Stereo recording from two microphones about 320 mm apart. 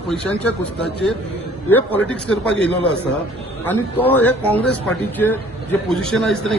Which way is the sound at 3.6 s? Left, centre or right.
Centre.